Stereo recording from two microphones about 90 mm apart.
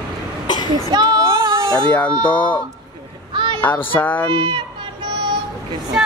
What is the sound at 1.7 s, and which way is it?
Speech, 15° left (ahead or behind).